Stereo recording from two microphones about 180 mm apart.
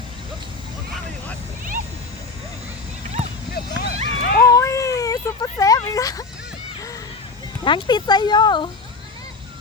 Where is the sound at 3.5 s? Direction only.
65° left (ahead or behind).